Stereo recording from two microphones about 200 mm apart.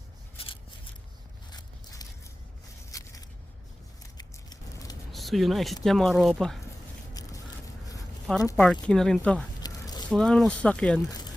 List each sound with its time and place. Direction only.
0.3 s a sound: 25° left (ahead or behind)
4.2 s scissors: 20° left (ahead or behind)
5.1 s speech: centre (ahead or behind)
8.4 s speech: 15° left (ahead or behind)
8.6 s speech: 5° left (ahead or behind)
9.6 s squish: 20° left (ahead or behind)
10.1 s speech: 5° left (ahead or behind)